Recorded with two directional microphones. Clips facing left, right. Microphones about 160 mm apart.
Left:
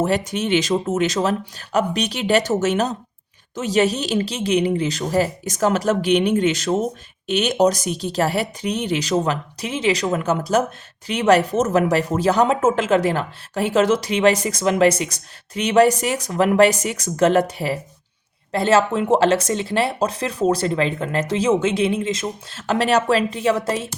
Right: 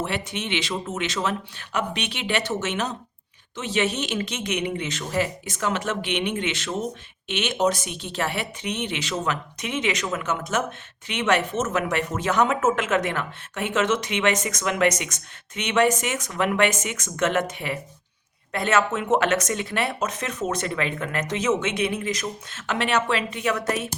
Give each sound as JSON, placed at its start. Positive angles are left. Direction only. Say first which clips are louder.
{"t": 0.0, "sound": "speech", "louder": "left 8 dB", "side_deg": 40}